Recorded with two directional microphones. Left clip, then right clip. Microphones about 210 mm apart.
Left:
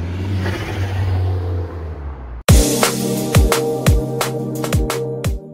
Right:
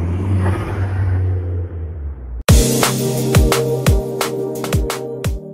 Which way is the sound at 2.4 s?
Centre (ahead or behind).